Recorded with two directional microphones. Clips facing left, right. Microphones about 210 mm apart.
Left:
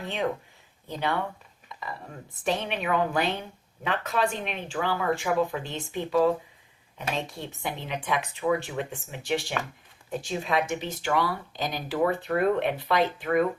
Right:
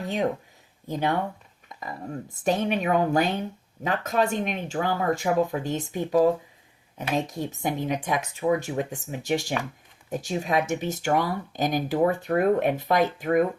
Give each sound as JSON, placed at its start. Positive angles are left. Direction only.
{"t": 0.0, "sound": "speech", "side_deg": -40}
{"t": 7.3, "sound": "speech", "side_deg": -45}